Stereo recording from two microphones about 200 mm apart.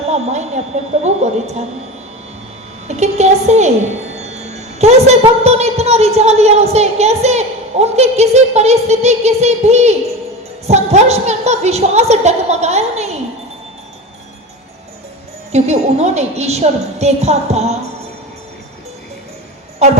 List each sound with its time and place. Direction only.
0.0 s a woman's voice: 35° right (ahead or behind)
2.8 s a woman's voice: 35° right (ahead or behind)
4.2 s wind chime: 35° right (ahead or behind)
10.7 s a woman's voice: 35° right (ahead or behind)
15.5 s a woman's voice: 35° right (ahead or behind)